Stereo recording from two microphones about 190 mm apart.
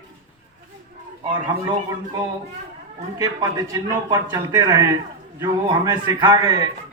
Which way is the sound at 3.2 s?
20° right (ahead or behind).